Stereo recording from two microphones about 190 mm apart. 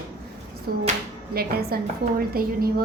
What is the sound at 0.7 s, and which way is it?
A woman's voice, 50° right (ahead or behind).